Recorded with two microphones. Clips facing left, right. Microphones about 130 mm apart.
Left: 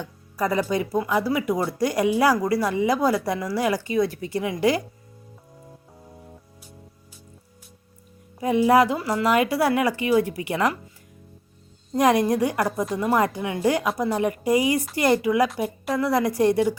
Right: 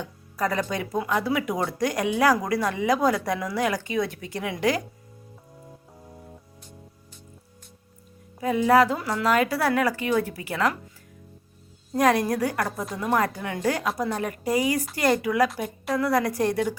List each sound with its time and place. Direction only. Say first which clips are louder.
0.0 s speech: left 1 dB; 5° left (ahead or behind)
8.4 s a woman's voice: left 1 dB; 15° left (ahead or behind)
11.9 s a woman's voice: left 2 dB; 15° left (ahead or behind)
13.1 s a woman's voice: even; 15° left (ahead or behind)